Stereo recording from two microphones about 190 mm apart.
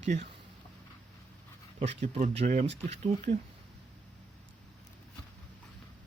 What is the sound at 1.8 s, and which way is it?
Speech, 35° right (ahead or behind).